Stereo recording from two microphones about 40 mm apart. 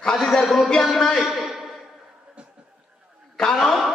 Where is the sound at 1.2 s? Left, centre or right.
Centre.